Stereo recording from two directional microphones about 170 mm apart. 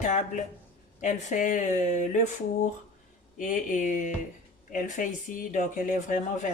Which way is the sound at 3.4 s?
50° left (ahead or behind).